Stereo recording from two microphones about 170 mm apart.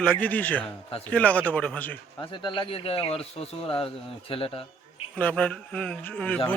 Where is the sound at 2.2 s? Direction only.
30° left (ahead or behind).